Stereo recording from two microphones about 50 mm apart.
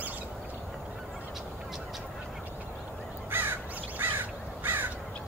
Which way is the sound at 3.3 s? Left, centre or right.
Right.